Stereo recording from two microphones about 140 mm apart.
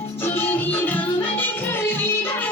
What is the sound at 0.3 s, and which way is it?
Music, 15° left (ahead or behind).